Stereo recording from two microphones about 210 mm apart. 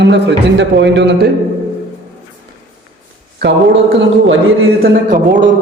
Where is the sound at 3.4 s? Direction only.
55° right (ahead or behind).